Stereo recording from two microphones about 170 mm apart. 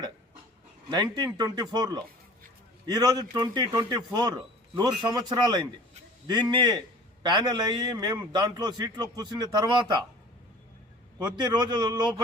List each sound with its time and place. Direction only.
0.9 s a man's voice: 25° right (ahead or behind)
11.2 s a man's voice: 25° right (ahead or behind)